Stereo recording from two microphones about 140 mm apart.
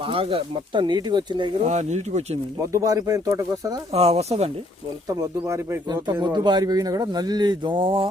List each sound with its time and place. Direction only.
0.0 s speech: 40° right (ahead or behind)
1.6 s speech: 55° right (ahead or behind)
2.6 s speech: 25° right (ahead or behind)
3.9 s speech: 45° right (ahead or behind)
5.0 s speech: 20° right (ahead or behind)